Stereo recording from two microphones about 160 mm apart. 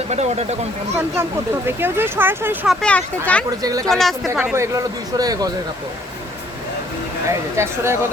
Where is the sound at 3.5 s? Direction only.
20° right (ahead or behind).